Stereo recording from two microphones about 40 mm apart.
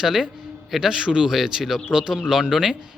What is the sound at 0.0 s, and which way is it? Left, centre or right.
A man's voice, centre.